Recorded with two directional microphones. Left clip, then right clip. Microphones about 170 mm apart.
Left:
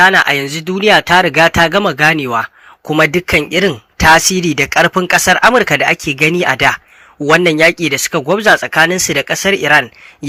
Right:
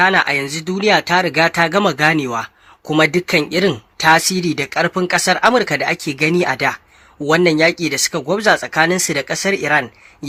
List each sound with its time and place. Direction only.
0.0 s speech: 20° left (ahead or behind)